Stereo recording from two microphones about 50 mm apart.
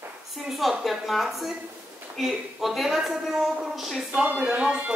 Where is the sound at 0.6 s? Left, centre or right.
Centre.